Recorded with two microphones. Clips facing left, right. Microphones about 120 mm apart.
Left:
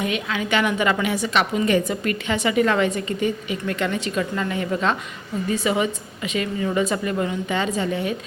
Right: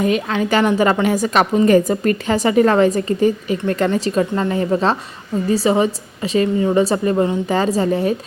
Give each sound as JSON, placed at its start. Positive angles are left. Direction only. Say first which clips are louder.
{"t": 0.0, "sound": "a woman's voice", "louder": "right 7 dB", "side_deg": -40}